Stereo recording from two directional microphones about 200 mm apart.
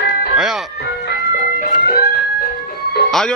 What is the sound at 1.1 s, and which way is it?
Music, 45° left (ahead or behind).